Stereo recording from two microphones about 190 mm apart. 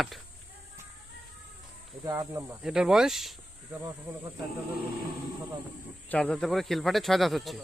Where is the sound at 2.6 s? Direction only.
5° right (ahead or behind).